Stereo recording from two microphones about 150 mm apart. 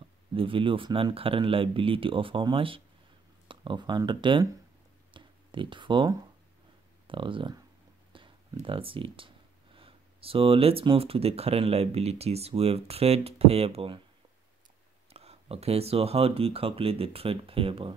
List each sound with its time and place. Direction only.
0.3 s speech: 35° right (ahead or behind)
5.1 s a sound: 35° right (ahead or behind)
7.1 s speech: 35° right (ahead or behind)
15.1 s speech: 40° right (ahead or behind)